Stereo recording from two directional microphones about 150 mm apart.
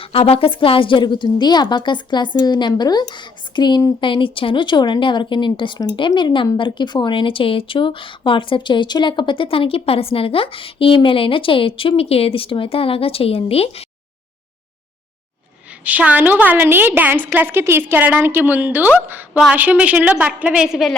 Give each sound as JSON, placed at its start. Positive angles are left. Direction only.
{"t": 0.0, "sound": "a woman's voice", "side_deg": 40}
{"t": 15.8, "sound": "a woman's voice", "side_deg": -10}